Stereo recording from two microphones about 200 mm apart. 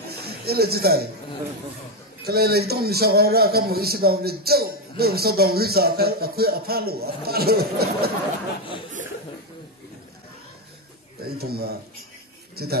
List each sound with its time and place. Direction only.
0.2 s speech: 50° right (ahead or behind)
2.2 s a man's voice: 50° right (ahead or behind)
11.2 s a man's voice: 50° right (ahead or behind)